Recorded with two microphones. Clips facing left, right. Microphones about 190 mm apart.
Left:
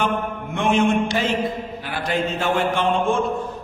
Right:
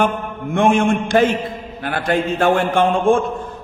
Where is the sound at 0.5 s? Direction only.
50° right (ahead or behind).